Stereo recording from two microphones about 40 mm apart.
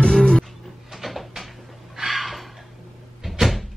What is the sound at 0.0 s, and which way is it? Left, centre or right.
Music, left.